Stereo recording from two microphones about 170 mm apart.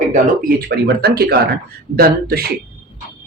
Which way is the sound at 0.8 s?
70° right (ahead or behind).